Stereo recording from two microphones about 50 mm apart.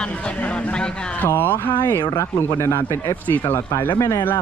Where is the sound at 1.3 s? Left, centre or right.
Left.